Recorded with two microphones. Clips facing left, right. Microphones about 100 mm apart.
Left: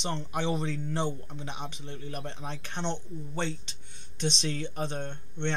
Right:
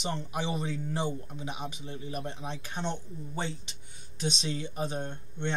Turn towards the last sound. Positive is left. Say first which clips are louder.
# left 1 dB
turn(degrees=-5)  # may be behind; listen again after turning